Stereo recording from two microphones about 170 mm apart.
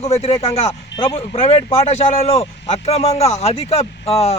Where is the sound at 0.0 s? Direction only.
35° left (ahead or behind).